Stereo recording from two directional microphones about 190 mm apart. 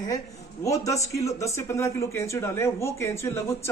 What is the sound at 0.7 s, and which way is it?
Speech, 15° left (ahead or behind).